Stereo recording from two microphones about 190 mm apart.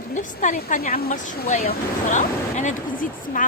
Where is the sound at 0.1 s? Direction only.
40° left (ahead or behind).